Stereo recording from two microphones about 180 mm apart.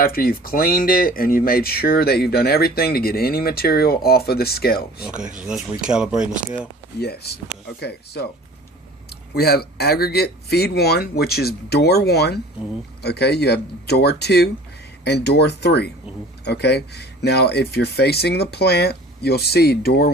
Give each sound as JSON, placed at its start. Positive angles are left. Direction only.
{"t": 0.0, "sound": "speech", "side_deg": 55}
{"t": 5.0, "sound": "speech", "side_deg": -5}
{"t": 7.0, "sound": "speech", "side_deg": 60}
{"t": 9.3, "sound": "speech", "side_deg": 60}